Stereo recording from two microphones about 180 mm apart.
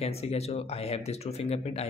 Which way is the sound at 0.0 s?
35° left (ahead or behind).